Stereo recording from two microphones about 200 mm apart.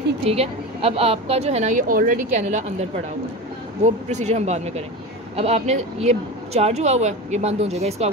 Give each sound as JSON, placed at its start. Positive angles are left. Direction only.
{"t": 0.2, "sound": "speech", "side_deg": -30}